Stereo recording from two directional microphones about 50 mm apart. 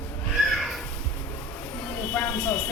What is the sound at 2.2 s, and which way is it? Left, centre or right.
Speech, left.